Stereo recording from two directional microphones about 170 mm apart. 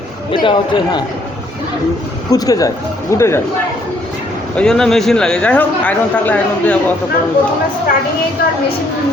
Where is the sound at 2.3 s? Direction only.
20° left (ahead or behind).